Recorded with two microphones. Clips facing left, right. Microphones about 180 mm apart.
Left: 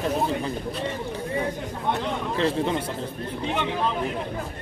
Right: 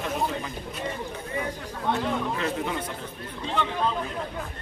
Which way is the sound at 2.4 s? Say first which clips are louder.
Left 5 dB; 30° left (ahead or behind).